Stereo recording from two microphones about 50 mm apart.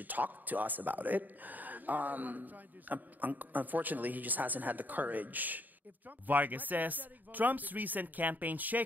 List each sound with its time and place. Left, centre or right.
0.0 s a man's voice: right